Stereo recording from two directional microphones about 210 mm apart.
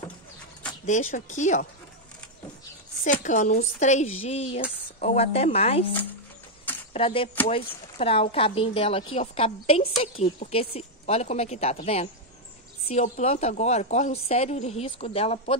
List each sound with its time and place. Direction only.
0.8 s a woman's voice: 35° left (ahead or behind)
3.0 s a woman's voice: 35° left (ahead or behind)
6.9 s a woman's voice: 25° left (ahead or behind)